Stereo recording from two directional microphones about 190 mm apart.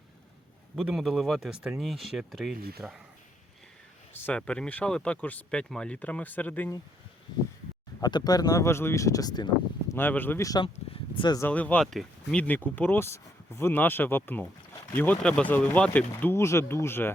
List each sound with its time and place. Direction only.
0.8 s speech: centre (ahead or behind)
2.6 s speech: 55° right (ahead or behind)
4.1 s speech: 10° left (ahead or behind)
8.0 s speech: 20° left (ahead or behind)
9.9 s speech: 10° left (ahead or behind)
11.4 s speech: 10° left (ahead or behind)